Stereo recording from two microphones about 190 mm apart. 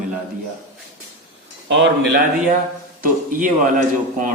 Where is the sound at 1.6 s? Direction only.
70° right (ahead or behind).